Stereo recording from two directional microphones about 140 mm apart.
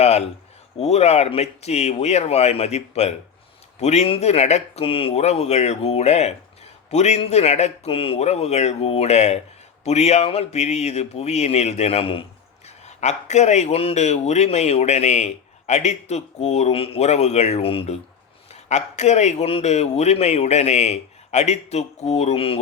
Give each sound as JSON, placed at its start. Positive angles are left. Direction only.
{"t": 0.0, "sound": "a man's voice", "side_deg": 50}
{"t": 12.6, "sound": "a man's voice", "side_deg": 55}
{"t": 18.7, "sound": "a man's voice", "side_deg": 55}